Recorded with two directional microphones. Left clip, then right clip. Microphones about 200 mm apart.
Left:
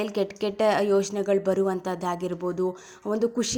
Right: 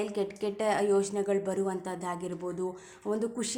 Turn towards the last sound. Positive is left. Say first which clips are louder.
# left 7 dB
turn(degrees=30)  # may be behind; listen again after turning